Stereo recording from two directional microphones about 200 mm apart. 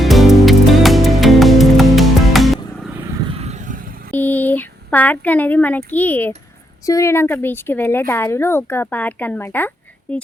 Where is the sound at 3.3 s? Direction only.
30° right (ahead or behind).